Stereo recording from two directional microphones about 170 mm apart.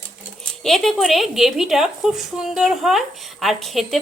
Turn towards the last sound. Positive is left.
turn(degrees=0)  # may be behind; listen again after turning